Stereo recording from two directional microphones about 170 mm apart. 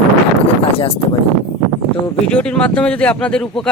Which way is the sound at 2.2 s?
5° left (ahead or behind).